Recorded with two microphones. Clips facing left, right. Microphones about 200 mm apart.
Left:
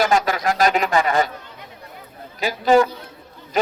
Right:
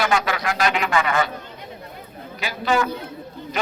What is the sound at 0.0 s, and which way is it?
A man's voice, 40° left (ahead or behind).